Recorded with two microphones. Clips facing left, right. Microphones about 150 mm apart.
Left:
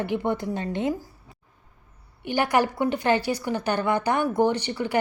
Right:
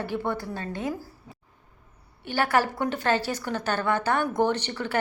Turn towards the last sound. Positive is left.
turn(degrees=10)  # may be behind; listen again after turning